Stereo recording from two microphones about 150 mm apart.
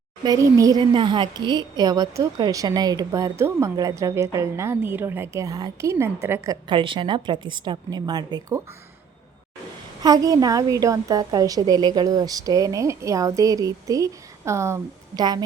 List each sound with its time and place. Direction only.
0.2 s a woman's voice: 25° right (ahead or behind)
10.0 s a woman's voice: 25° right (ahead or behind)